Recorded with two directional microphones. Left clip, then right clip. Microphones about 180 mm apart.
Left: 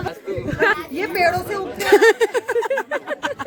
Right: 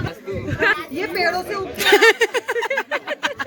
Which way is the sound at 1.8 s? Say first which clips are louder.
Even; 20° left (ahead or behind).